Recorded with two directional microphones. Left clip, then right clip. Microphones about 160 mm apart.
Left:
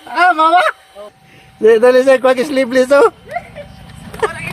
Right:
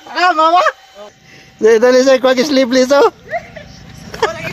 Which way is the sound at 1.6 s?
20° right (ahead or behind).